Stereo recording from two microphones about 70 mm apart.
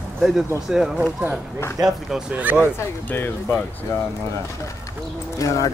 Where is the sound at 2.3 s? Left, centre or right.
Right.